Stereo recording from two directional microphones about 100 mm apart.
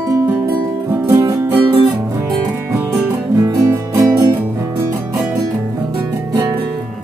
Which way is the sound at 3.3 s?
30° right (ahead or behind).